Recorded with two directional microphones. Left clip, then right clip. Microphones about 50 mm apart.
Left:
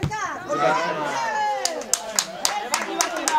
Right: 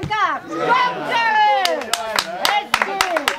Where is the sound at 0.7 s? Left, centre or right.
Right.